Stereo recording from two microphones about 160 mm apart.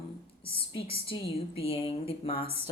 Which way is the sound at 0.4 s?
35° left (ahead or behind).